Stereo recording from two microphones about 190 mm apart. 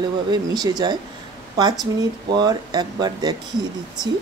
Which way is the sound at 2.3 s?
20° right (ahead or behind).